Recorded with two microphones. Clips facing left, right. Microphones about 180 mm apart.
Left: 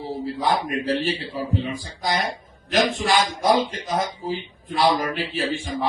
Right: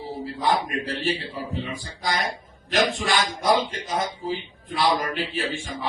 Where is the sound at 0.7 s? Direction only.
45° left (ahead or behind).